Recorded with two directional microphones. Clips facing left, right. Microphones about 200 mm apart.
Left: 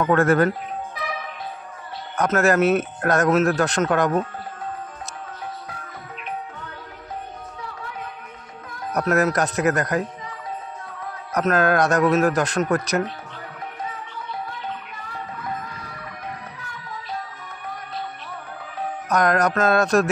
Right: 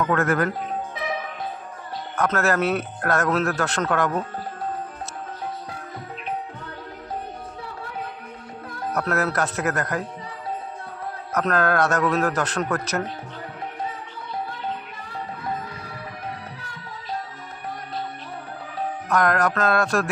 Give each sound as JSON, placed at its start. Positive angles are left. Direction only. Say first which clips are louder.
{"t": 0.0, "sound": "speech", "louder": "left 4 dB", "side_deg": 30}
{"t": 2.1, "sound": "a man's voice", "louder": "left 4 dB", "side_deg": 15}
{"t": 8.9, "sound": "a man's voice", "louder": "left 4 dB", "side_deg": 15}
{"t": 11.3, "sound": "a man's voice", "louder": "left 2 dB", "side_deg": 15}
{"t": 19.0, "sound": "speech", "louder": "left 2 dB", "side_deg": 20}